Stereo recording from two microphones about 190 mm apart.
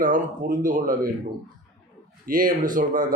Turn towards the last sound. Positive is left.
turn(degrees=-45)  # may be behind; listen again after turning